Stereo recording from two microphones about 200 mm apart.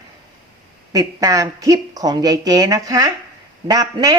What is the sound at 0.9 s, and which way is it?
Speech, 20° right (ahead or behind).